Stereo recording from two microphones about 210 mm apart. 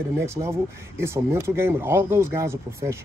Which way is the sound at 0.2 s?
10° right (ahead or behind).